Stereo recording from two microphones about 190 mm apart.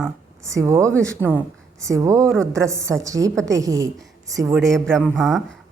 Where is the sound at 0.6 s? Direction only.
15° right (ahead or behind).